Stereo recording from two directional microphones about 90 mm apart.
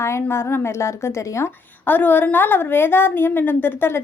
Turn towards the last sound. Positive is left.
turn(degrees=25)  # may be behind; listen again after turning